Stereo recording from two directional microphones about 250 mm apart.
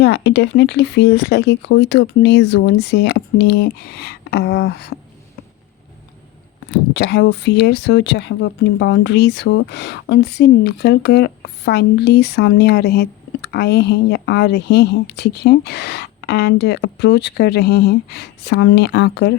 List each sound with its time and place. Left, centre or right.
0.0 s speech: left
6.9 s speech: left